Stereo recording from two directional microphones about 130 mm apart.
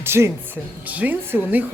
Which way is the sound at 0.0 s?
20° right (ahead or behind).